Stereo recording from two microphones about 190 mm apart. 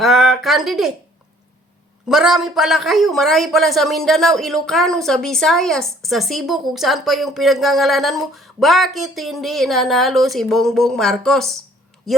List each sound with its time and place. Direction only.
0.0 s speech: centre (ahead or behind)
2.0 s speech: centre (ahead or behind)